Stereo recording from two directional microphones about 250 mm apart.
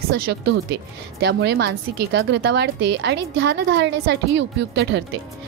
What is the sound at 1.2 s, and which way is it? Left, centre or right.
A woman's voice, right.